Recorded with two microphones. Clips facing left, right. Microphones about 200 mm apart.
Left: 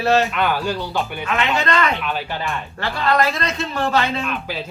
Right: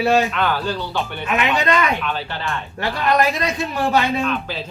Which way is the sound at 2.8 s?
15° right (ahead or behind).